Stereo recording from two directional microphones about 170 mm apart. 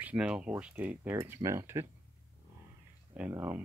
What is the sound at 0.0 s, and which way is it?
Speech, 5° right (ahead or behind).